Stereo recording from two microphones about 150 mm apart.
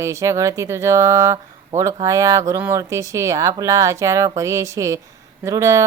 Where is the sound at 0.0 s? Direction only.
20° right (ahead or behind).